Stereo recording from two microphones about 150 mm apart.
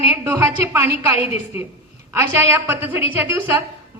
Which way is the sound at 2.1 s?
15° right (ahead or behind).